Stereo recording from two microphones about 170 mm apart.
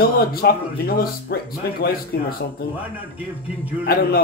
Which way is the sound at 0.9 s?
60° left (ahead or behind).